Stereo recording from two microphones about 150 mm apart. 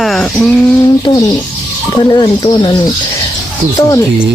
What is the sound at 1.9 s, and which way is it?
Speech, 30° left (ahead or behind).